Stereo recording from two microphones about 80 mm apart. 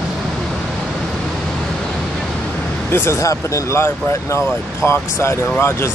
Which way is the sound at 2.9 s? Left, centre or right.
Left.